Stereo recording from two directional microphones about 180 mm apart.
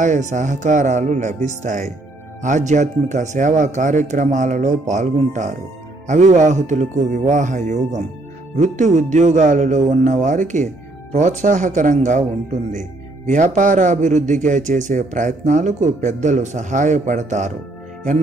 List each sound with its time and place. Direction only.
0.0 s a man's voice: 40° right (ahead or behind)